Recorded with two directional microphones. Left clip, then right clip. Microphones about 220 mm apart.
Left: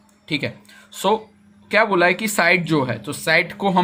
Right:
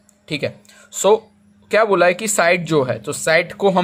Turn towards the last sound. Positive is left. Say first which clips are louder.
# right 2 dB
turn(degrees=-30)  # may be behind; listen again after turning